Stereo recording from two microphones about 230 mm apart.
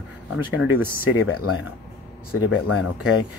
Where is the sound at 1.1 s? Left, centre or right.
Left.